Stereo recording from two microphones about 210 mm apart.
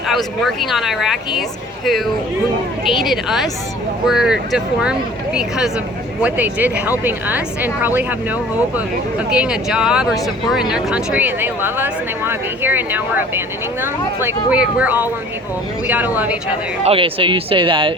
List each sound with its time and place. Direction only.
0.1 s speech: centre (ahead or behind)
16.8 s speech: 25° right (ahead or behind)